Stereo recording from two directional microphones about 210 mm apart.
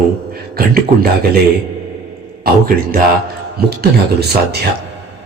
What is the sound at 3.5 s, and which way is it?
Speech, 50° right (ahead or behind).